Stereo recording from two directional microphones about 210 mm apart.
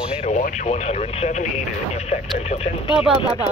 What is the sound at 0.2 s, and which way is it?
Speech, 35° left (ahead or behind).